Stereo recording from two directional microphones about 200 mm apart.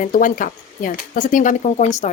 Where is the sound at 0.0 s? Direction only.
40° left (ahead or behind).